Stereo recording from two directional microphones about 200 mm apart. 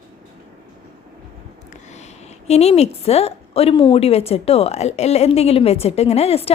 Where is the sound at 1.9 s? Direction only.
35° left (ahead or behind).